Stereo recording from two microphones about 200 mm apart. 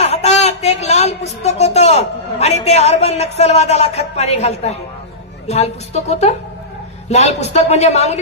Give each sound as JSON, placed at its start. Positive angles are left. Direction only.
{"t": 0.0, "sound": "a woman's voice", "side_deg": 30}